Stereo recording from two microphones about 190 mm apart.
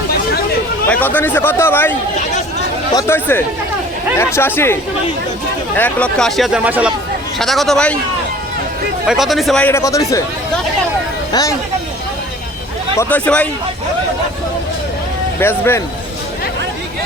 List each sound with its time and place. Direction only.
0.9 s speech: 10° left (ahead or behind)
9.0 s speech: centre (ahead or behind); by 10.2 s 15° left (ahead or behind)
11.3 s speech: 20° left (ahead or behind)
13.0 s speech: 10° left (ahead or behind)
15.4 s speech: 10° left (ahead or behind)